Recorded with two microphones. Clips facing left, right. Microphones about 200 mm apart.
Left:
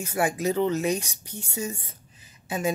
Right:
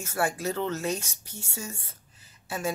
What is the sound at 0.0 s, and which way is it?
Speech, 15° left (ahead or behind).